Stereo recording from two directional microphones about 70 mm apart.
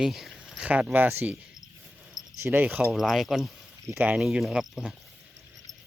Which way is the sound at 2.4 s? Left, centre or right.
Right.